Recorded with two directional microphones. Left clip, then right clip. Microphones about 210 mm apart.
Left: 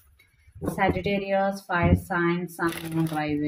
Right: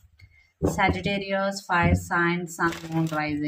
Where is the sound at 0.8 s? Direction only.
20° right (ahead or behind).